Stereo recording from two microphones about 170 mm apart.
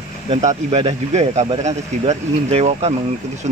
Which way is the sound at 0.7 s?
35° right (ahead or behind).